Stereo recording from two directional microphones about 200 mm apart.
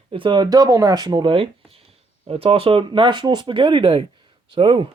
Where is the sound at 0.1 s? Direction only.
25° right (ahead or behind).